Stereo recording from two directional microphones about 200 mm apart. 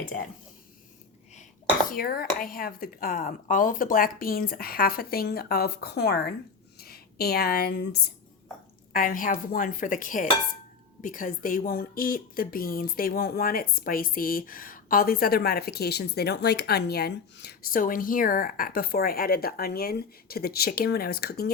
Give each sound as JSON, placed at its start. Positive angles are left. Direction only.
{"t": 1.9, "sound": "speech", "side_deg": 45}
{"t": 8.9, "sound": "speech", "side_deg": 45}